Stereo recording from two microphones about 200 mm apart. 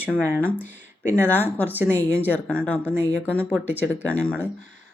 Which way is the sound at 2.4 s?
5° left (ahead or behind).